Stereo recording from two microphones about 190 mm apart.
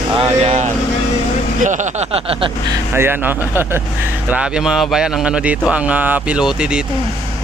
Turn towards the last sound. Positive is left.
turn(degrees=-5)  # may be behind; listen again after turning